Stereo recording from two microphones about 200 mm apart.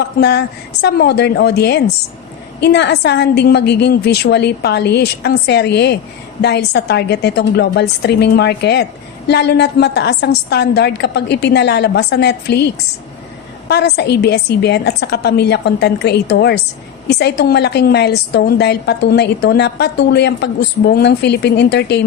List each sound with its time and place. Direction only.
0.2 s a woman's voice: 55° left (ahead or behind)